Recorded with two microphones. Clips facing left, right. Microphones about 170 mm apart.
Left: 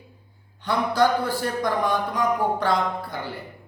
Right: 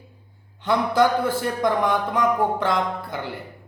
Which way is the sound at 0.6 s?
20° right (ahead or behind).